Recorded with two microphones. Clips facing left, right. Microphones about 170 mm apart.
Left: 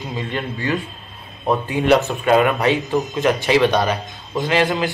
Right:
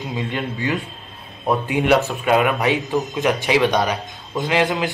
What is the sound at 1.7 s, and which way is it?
Speech, 15° right (ahead or behind).